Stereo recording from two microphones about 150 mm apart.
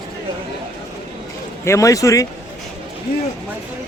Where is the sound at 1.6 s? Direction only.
20° left (ahead or behind).